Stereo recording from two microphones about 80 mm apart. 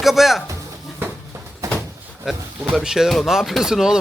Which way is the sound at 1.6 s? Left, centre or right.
Right.